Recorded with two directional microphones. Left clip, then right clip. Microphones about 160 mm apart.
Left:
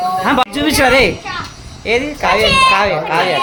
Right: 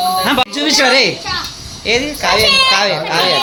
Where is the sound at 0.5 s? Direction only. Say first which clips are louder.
Right 1 dB; 20° left (ahead or behind).